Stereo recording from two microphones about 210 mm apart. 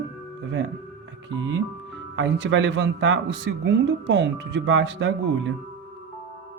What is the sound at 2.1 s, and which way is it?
Speech, 55° right (ahead or behind).